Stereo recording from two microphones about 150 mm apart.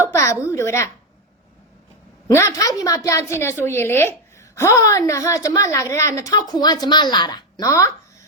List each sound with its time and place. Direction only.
0.4 s a woman's voice: 20° left (ahead or behind)
2.2 s a woman's voice: 15° left (ahead or behind)